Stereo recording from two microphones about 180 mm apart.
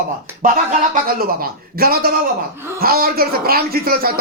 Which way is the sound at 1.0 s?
55° right (ahead or behind).